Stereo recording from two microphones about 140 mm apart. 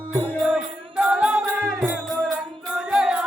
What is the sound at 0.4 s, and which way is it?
Music, 10° right (ahead or behind).